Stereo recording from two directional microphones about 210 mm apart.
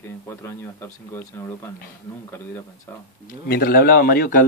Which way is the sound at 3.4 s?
45° left (ahead or behind).